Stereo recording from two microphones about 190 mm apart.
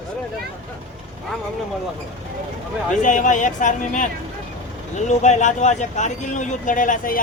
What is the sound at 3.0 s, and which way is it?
Speech, 40° left (ahead or behind).